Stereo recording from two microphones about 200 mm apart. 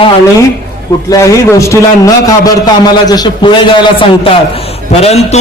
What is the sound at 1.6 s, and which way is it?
A man's voice, 15° left (ahead or behind).